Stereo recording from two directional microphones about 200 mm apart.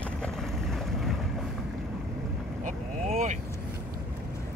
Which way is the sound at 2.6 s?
40° right (ahead or behind).